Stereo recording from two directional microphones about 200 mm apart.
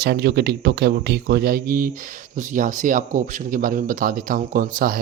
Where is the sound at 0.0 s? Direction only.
55° right (ahead or behind).